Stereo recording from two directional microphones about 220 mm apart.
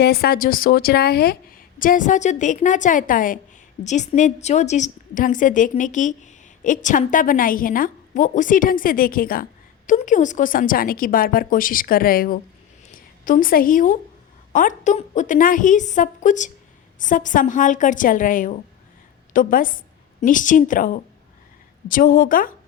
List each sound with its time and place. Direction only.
0.0 s a woman's voice: 45° left (ahead or behind)